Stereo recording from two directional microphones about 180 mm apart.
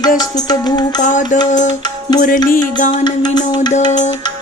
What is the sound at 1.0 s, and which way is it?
Music, 45° left (ahead or behind).